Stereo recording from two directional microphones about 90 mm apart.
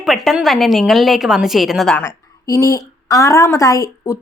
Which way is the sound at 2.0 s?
30° left (ahead or behind).